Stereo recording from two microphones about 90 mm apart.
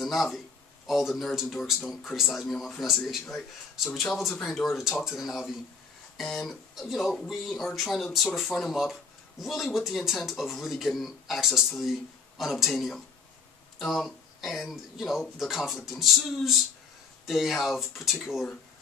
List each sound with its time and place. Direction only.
0.0 s speech: centre (ahead or behind)